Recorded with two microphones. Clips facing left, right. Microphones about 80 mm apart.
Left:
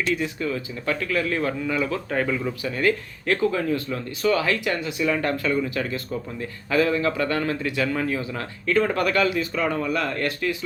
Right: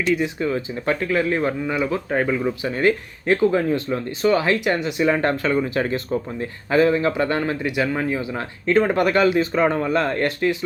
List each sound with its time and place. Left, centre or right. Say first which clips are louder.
0.2 s speech: right 4 dB; right